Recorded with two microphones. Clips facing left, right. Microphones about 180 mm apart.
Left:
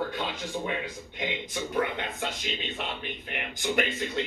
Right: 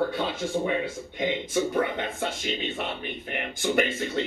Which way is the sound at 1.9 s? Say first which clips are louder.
Right 3 dB; 45° right (ahead or behind).